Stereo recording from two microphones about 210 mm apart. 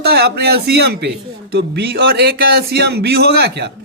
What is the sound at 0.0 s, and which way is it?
Speech, 50° right (ahead or behind).